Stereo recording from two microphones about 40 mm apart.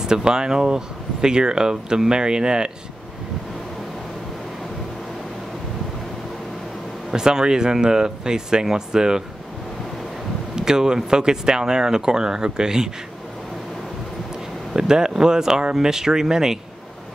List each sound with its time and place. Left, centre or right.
0.0 s speech: centre
7.1 s speech: centre
10.5 s a sound: centre
11.1 s speech: centre
14.7 s speech: centre